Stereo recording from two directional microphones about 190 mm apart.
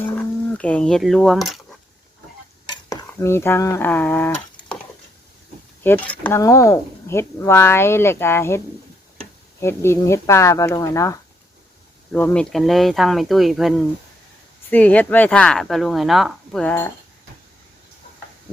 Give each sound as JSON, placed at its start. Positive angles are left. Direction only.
{"t": 0.0, "sound": "a sound", "side_deg": 10}
{"t": 2.6, "sound": "stir", "side_deg": 20}
{"t": 3.1, "sound": "speech", "side_deg": 15}
{"t": 5.8, "sound": "speech", "side_deg": 10}
{"t": 12.1, "sound": "speech", "side_deg": 5}